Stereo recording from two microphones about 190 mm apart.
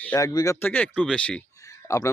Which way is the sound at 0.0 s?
10° left (ahead or behind).